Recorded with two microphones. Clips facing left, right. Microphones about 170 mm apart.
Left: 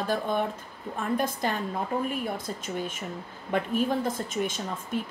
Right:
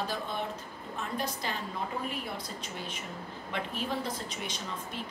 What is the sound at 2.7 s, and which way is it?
A woman's voice, 50° left (ahead or behind).